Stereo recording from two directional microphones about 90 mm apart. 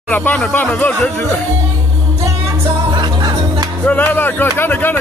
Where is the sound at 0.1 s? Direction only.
20° left (ahead or behind).